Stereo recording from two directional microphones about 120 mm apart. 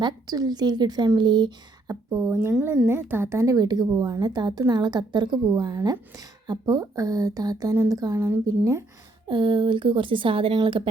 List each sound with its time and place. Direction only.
0.0 s a woman's voice: 35° right (ahead or behind)
9.3 s speech: 40° right (ahead or behind)